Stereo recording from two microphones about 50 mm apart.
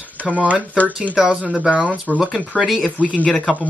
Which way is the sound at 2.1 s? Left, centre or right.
Left.